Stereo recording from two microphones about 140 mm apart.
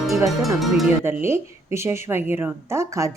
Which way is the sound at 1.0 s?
15° right (ahead or behind).